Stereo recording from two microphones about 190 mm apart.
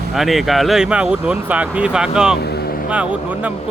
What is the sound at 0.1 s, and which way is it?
Speech, centre (ahead or behind).